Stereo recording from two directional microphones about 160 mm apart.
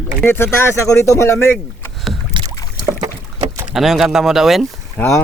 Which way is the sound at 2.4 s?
30° right (ahead or behind).